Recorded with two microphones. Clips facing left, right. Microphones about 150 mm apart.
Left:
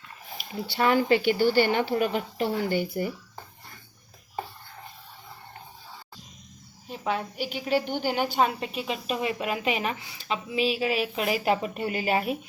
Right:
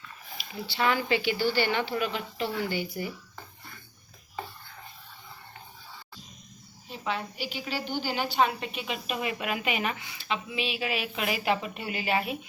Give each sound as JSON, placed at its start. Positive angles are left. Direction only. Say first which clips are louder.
{"t": 0.3, "sound": "a woman's voice", "louder": "left 3 dB", "side_deg": 50}
{"t": 6.8, "sound": "a woman's voice", "louder": "left 3 dB", "side_deg": 45}